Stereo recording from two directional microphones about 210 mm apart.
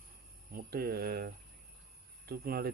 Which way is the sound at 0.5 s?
45° right (ahead or behind).